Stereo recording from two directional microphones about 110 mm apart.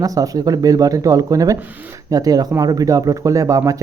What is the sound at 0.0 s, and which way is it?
Speech, 35° right (ahead or behind).